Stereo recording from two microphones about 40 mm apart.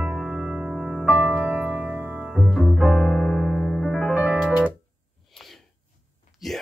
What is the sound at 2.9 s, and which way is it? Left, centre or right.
Piano, centre.